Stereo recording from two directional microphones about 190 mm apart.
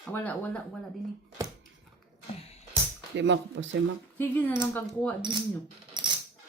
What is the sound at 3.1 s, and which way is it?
Speech, 70° right (ahead or behind).